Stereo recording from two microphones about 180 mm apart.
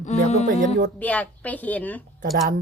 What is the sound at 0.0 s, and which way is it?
Music, 40° left (ahead or behind).